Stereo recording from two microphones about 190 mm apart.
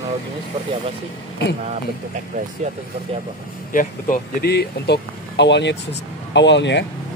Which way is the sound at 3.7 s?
45° left (ahead or behind).